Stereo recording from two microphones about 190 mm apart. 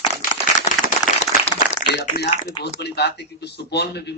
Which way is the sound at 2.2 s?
30° left (ahead or behind).